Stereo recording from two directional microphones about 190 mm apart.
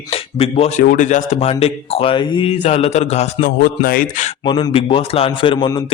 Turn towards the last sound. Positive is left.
turn(degrees=25)  # may be behind; listen again after turning